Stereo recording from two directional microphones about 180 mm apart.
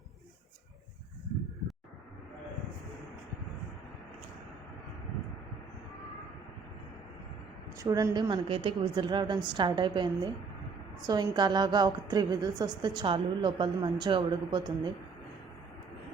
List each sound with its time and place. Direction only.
7.8 s a woman's voice: 20° right (ahead or behind)